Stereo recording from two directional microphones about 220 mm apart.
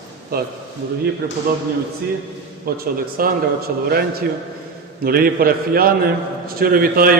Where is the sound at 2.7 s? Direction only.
40° right (ahead or behind).